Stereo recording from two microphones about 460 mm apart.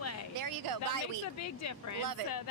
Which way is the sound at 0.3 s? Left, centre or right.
Right.